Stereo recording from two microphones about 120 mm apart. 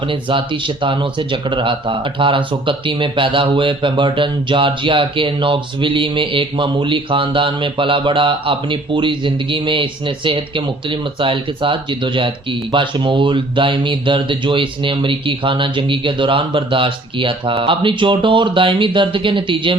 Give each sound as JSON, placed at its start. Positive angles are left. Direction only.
{"t": 0.0, "sound": "speech", "side_deg": -45}